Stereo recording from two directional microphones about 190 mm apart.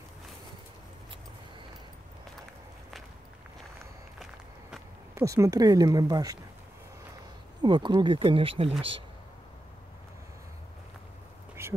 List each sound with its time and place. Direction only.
5.1 s speech: 15° right (ahead or behind)
7.6 s speech: 25° right (ahead or behind)
11.6 s a sound: 15° right (ahead or behind)